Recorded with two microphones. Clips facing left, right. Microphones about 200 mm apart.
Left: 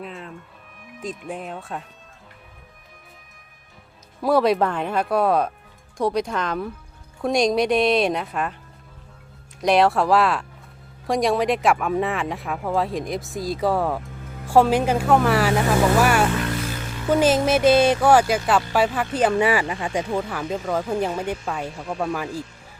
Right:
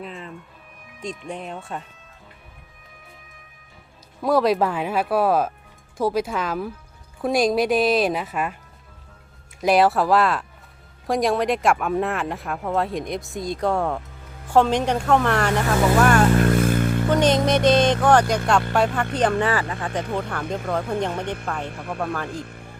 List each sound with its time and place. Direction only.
0.0 s music: centre (ahead or behind)
1.0 s speech: 5° left (ahead or behind)
4.2 s speech: centre (ahead or behind)
9.6 s speech: 5° right (ahead or behind)
16.4 s a sound: 50° right (ahead or behind)
17.1 s speech: 5° left (ahead or behind)